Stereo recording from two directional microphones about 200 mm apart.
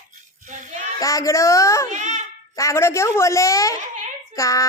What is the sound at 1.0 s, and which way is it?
Child singing, 15° left (ahead or behind).